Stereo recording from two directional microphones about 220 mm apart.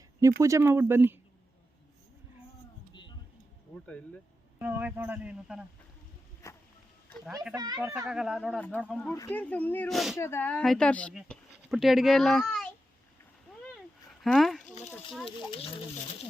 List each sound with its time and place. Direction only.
0.2 s speech: 15° right (ahead or behind)
3.8 s speech: 5° left (ahead or behind)
4.6 s speech: 5° right (ahead or behind)
6.4 s music: 10° left (ahead or behind)
7.5 s speech: 15° right (ahead or behind)
8.0 s speech: centre (ahead or behind)
10.2 s speech: 10° left (ahead or behind)
14.2 s speech: centre (ahead or behind)